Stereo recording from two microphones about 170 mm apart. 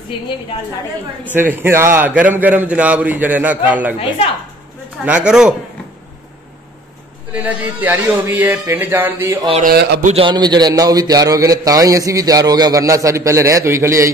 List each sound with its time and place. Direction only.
1.3 s a man's voice: 10° right (ahead or behind)
5.0 s speech: 5° right (ahead or behind)
7.3 s a man's voice: 10° right (ahead or behind)
9.6 s a man's voice: 65° right (ahead or behind)
10.0 s a man's voice: 30° right (ahead or behind); by 14.1 s 15° right (ahead or behind)